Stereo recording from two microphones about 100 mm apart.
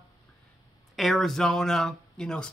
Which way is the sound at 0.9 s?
Centre (ahead or behind).